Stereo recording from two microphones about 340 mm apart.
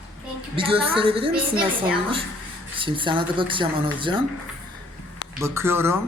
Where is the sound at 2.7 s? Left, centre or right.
Centre.